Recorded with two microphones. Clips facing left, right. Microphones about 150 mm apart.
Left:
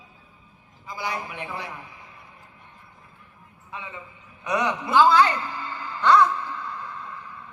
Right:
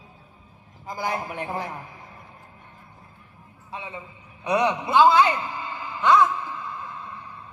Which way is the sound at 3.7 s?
30° right (ahead or behind).